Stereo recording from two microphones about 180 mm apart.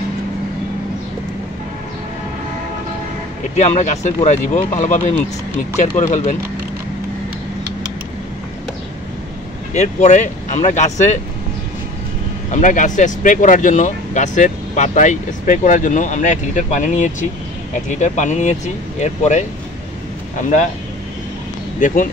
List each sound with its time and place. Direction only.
3.5 s speech: 40° left (ahead or behind)
9.8 s speech: 40° left (ahead or behind)
12.4 s speech: 45° left (ahead or behind)
21.7 s speech: 45° left (ahead or behind)